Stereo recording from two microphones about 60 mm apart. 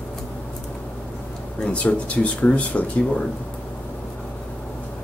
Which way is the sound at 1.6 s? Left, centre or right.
Centre.